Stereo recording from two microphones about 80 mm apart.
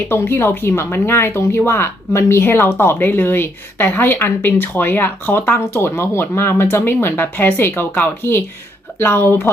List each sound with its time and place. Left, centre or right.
0.1 s speech: left